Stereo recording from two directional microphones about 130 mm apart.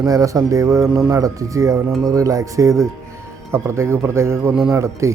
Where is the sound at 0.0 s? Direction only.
25° right (ahead or behind).